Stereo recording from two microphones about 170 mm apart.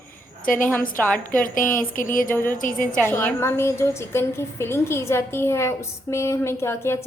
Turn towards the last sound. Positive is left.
turn(degrees=15)  # may be behind; listen again after turning